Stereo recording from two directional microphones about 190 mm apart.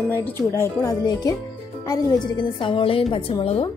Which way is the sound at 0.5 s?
15° left (ahead or behind).